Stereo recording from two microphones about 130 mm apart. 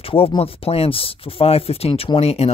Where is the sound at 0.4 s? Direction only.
50° left (ahead or behind).